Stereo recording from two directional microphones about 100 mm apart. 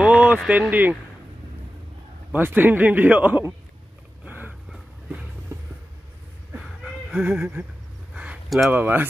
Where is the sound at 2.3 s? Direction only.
20° right (ahead or behind).